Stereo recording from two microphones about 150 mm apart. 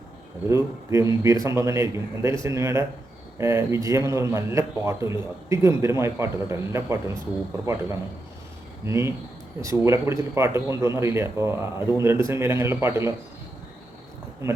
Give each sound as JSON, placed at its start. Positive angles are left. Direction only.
{"t": 0.4, "sound": "speech", "side_deg": -20}
{"t": 8.9, "sound": "speech", "side_deg": -20}
{"t": 14.4, "sound": "speech", "side_deg": -20}